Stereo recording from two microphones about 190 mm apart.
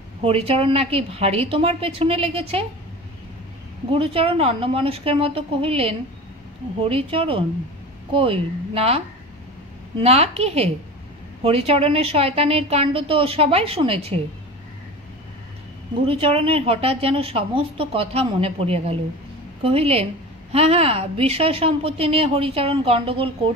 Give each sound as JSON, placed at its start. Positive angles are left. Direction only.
{"t": 0.2, "sound": "a woman's voice", "side_deg": -30}
{"t": 3.9, "sound": "a woman's voice", "side_deg": -30}
{"t": 16.1, "sound": "a woman's voice", "side_deg": -30}